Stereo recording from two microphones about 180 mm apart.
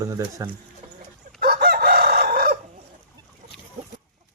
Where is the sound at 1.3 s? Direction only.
55° right (ahead or behind).